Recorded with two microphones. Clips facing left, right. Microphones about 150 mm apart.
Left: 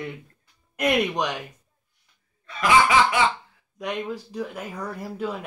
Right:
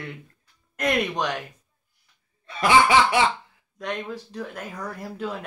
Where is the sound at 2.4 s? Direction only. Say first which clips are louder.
Right 1 dB; 30° right (ahead or behind).